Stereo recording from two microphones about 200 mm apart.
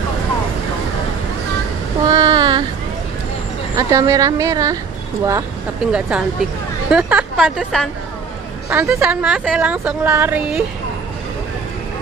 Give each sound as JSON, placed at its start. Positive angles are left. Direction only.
{"t": 2.0, "sound": "child singing", "side_deg": -20}
{"t": 3.7, "sound": "a woman's voice", "side_deg": -15}
{"t": 5.9, "sound": "a woman's voice", "side_deg": -5}